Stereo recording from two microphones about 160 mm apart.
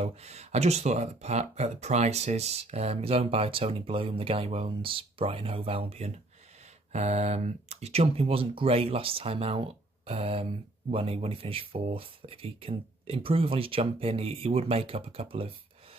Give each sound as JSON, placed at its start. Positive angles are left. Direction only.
{"t": 0.0, "sound": "speech", "side_deg": -45}